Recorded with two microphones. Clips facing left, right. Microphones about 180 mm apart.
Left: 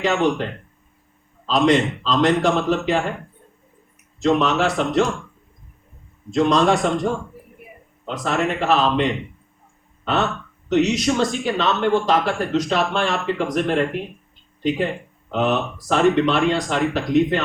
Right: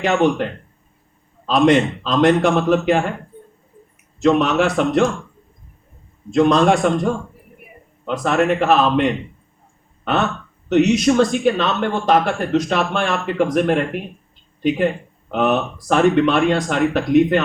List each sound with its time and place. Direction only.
0.0 s speech: 55° right (ahead or behind)
1.5 s speech: 55° right (ahead or behind)
4.2 s speech: 55° right (ahead or behind)
6.3 s speech: 55° right (ahead or behind)
8.0 s speech: 55° right (ahead or behind)
15.3 s speech: 55° right (ahead or behind)